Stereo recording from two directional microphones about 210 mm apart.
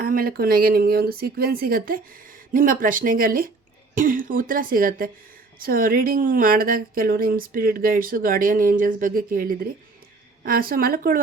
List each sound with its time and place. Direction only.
0.0 s a woman's voice: 45° right (ahead or behind)